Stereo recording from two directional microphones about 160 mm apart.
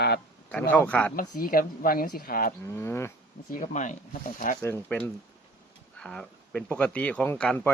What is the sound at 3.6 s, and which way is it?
Speech, 50° left (ahead or behind).